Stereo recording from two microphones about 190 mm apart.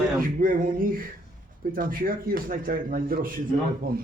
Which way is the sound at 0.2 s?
45° right (ahead or behind).